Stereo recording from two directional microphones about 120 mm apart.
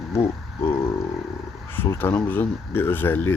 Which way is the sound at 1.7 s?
20° left (ahead or behind).